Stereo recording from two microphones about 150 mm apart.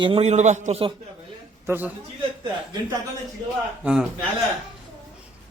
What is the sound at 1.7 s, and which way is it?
Speech, 15° right (ahead or behind).